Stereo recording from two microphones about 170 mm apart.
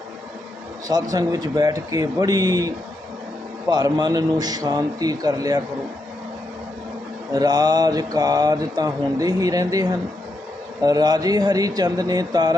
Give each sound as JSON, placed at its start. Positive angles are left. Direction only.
{"t": 1.1, "sound": "speech", "side_deg": -20}
{"t": 7.3, "sound": "speech", "side_deg": -25}
{"t": 10.8, "sound": "speech", "side_deg": -20}